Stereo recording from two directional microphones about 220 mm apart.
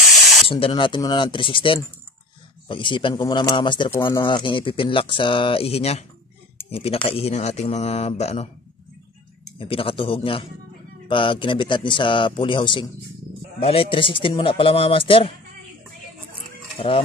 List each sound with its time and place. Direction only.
0.5 s speech: 25° left (ahead or behind)
9.6 s speech: 25° left (ahead or behind)
16.7 s stir: 25° left (ahead or behind)